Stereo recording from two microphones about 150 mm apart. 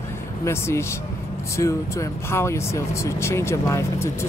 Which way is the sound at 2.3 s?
20° left (ahead or behind).